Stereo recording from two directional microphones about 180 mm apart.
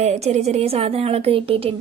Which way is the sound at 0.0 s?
40° right (ahead or behind).